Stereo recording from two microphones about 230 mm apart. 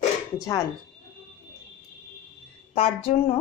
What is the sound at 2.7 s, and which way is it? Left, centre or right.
Speech, left.